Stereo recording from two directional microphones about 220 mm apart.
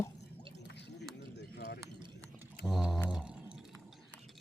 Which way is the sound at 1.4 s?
45° left (ahead or behind).